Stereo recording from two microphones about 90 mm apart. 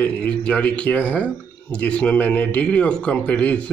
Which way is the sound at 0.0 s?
10° left (ahead or behind).